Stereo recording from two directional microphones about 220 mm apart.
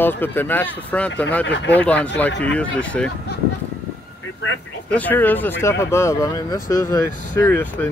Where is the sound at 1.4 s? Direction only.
55° left (ahead or behind).